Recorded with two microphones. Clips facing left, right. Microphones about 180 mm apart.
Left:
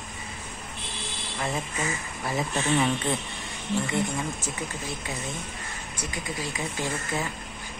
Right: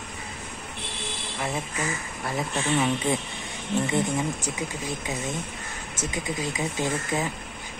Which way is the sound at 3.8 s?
20° right (ahead or behind).